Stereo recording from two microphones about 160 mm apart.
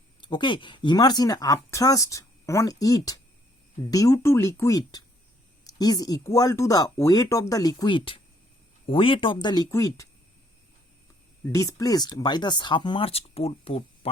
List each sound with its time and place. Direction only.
0.2 s speech: 30° left (ahead or behind)
11.5 s speech: 20° left (ahead or behind); by 14.1 s 40° left (ahead or behind)